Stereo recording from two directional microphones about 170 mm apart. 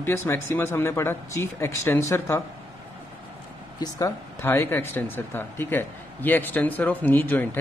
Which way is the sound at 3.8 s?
20° left (ahead or behind).